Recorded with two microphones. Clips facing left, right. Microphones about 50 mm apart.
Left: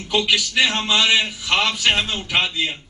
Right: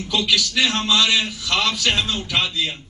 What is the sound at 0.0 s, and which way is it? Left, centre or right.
A man's voice, left.